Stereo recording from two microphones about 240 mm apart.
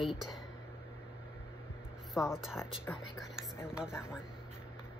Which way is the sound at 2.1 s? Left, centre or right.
Centre.